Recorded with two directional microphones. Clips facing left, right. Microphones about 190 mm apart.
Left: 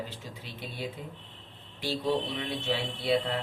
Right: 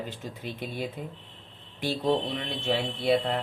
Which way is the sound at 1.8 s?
50° right (ahead or behind).